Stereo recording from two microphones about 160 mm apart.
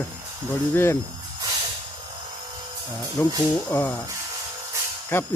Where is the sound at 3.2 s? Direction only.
15° left (ahead or behind).